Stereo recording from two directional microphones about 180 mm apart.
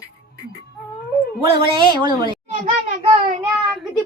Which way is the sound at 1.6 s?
25° right (ahead or behind).